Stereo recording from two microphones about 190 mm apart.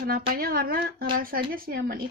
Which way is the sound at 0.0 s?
50° right (ahead or behind).